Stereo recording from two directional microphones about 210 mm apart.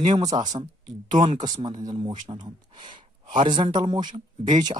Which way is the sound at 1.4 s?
20° right (ahead or behind).